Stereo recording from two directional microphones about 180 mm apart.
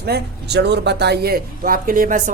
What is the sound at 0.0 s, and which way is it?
Speech, 65° right (ahead or behind).